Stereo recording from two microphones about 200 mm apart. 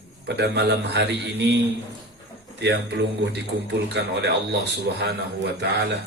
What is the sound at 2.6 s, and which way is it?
A man's voice, 60° right (ahead or behind).